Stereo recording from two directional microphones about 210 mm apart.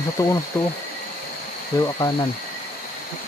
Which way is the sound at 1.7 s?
15° left (ahead or behind).